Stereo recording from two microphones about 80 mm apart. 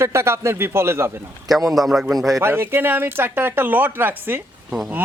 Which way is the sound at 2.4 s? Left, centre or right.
Right.